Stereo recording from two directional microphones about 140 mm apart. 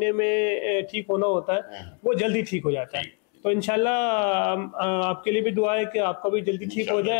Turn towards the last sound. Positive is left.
turn(degrees=15)  # may be behind; listen again after turning